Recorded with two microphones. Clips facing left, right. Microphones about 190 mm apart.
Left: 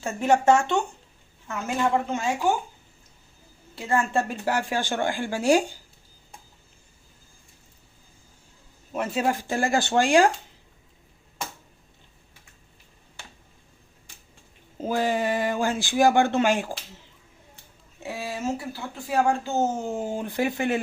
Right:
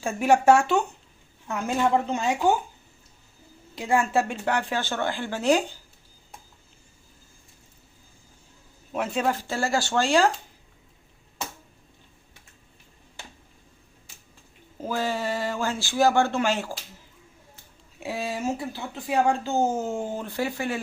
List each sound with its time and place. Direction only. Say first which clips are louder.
0.0 s speech: right 1 dB; 10° right (ahead or behind)
2.0 s speech: right 1 dB; 15° right (ahead or behind)
3.8 s speech: right 1 dB; 10° right (ahead or behind); by 5.7 s 10° left (ahead or behind)
8.9 s speech: even; centre (ahead or behind)
9.3 s speech: left 2 dB; 15° left (ahead or behind)
14.8 s speech: left 3 dB; 20° left (ahead or behind)
18.0 s speech: right 1 dB; 15° right (ahead or behind); by 20.8 s 20° left (ahead or behind)